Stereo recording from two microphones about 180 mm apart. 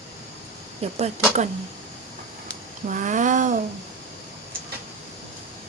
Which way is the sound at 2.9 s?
45° right (ahead or behind).